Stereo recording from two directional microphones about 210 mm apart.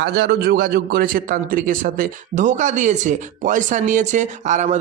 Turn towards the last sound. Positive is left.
turn(degrees=-35)  # may be behind; listen again after turning